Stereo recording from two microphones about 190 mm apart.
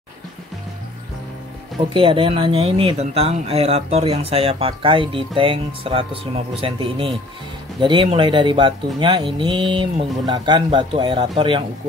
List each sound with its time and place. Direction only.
2.0 s speech: 25° right (ahead or behind)